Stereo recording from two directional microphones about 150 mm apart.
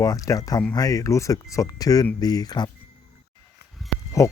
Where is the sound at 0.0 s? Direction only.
25° left (ahead or behind).